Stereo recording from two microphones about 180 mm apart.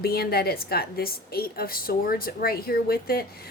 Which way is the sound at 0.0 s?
60° left (ahead or behind).